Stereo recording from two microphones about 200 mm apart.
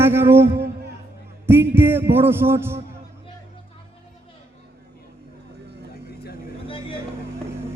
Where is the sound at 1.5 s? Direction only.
10° right (ahead or behind).